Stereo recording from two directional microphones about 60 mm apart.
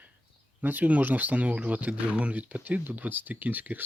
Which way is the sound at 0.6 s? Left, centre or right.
Right.